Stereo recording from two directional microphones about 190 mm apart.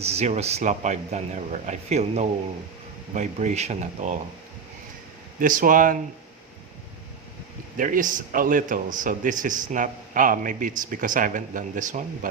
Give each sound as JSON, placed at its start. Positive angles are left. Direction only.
{"t": 0.0, "sound": "a man's voice", "side_deg": -35}
{"t": 5.4, "sound": "speech", "side_deg": -45}
{"t": 7.8, "sound": "speech", "side_deg": -45}